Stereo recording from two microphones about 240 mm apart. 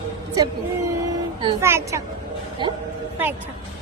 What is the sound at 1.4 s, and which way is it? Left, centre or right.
Speech, centre.